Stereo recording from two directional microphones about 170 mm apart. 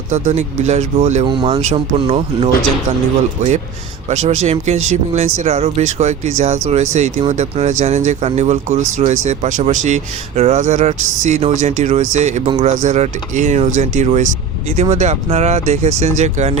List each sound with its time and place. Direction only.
0.1 s speech: 40° right (ahead or behind)
1.2 s speech: 30° right (ahead or behind)
4.1 s speech: 40° right (ahead or behind)